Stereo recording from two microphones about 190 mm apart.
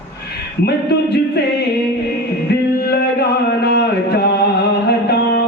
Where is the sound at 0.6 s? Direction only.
60° left (ahead or behind).